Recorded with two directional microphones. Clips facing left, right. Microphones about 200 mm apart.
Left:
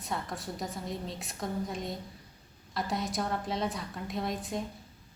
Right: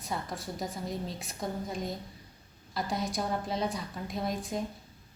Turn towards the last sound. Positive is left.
turn(degrees=0)  # may be behind; listen again after turning